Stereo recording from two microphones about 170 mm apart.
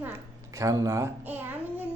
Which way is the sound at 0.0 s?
15° right (ahead or behind).